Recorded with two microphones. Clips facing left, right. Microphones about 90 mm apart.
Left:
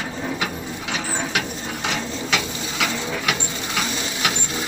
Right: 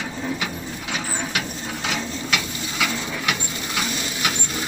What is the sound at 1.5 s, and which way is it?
Ratchet, 15° left (ahead or behind).